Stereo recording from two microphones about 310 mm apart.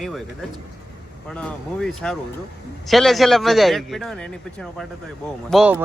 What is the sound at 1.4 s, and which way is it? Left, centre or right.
Speech, centre.